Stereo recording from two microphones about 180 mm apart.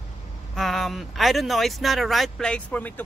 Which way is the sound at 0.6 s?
Centre (ahead or behind).